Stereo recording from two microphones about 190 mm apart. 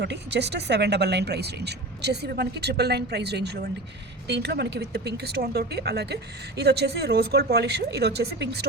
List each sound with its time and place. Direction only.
0.0 s speech: 65° right (ahead or behind)